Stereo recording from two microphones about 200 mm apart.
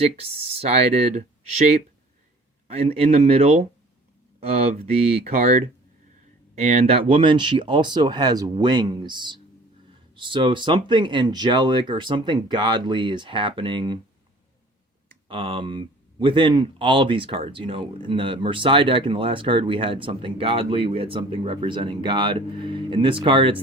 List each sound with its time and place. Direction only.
0.0 s speech: 30° right (ahead or behind)
2.6 s speech: 30° right (ahead or behind)
6.6 s speech: 35° right (ahead or behind)
15.3 s speech: 25° right (ahead or behind)